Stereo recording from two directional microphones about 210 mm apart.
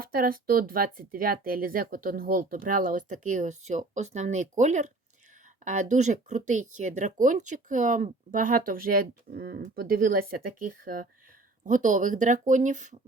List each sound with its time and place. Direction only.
0.0 s speech: 45° right (ahead or behind)